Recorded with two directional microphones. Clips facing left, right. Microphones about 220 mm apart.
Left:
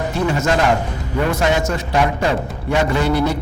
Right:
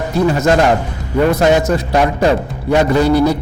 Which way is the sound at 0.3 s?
35° right (ahead or behind).